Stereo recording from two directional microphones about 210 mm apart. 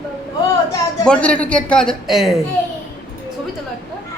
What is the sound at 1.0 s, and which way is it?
A man's voice, 5° left (ahead or behind).